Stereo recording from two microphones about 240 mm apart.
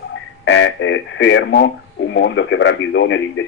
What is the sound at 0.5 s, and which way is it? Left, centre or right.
Speech, left.